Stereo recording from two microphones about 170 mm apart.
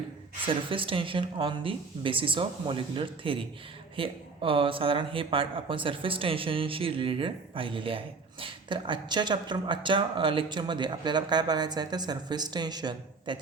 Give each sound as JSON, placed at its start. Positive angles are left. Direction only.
{"t": 0.4, "sound": "speech", "side_deg": -30}